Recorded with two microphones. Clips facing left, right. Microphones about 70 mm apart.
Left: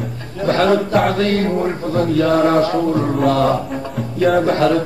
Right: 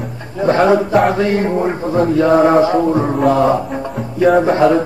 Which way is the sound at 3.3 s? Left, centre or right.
Centre.